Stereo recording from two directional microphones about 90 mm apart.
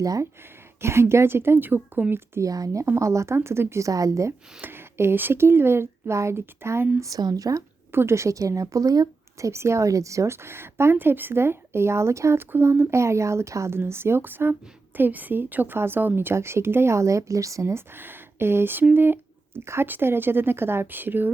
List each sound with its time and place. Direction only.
0.0 s speech: 45° right (ahead or behind)
0.8 s a woman's voice: 30° right (ahead or behind)
2.5 s a woman's voice: 40° right (ahead or behind)
2.8 s a woman's voice: 30° right (ahead or behind)
4.6 s a woman's voice: 25° right (ahead or behind)
7.1 s a woman's voice: 45° right (ahead or behind)
7.9 s a woman's voice: 30° right (ahead or behind)
9.5 s a woman's voice: 30° right (ahead or behind)